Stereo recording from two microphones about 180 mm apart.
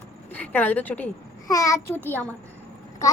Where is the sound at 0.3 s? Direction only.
10° left (ahead or behind).